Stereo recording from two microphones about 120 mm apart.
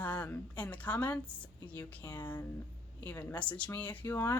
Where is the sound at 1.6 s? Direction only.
15° left (ahead or behind).